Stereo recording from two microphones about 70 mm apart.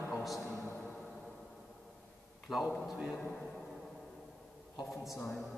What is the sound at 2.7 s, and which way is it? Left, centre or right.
Speech, centre.